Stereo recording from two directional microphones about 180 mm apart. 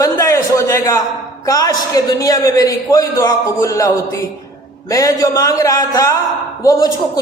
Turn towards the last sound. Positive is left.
turn(degrees=20)  # may be behind; listen again after turning